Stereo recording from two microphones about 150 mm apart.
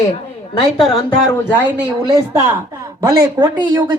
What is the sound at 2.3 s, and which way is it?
Speech, 15° right (ahead or behind).